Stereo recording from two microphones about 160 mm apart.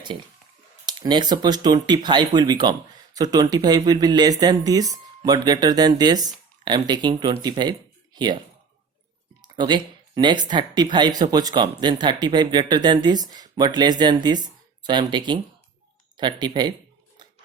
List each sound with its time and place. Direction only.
0.9 s speech: 25° right (ahead or behind)
9.4 s speech: 30° right (ahead or behind)